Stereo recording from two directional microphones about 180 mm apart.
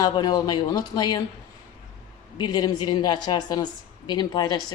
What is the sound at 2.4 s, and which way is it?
A woman's voice, 25° left (ahead or behind).